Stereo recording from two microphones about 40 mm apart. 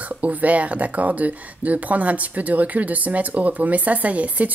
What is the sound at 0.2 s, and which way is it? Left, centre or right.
Speech, right.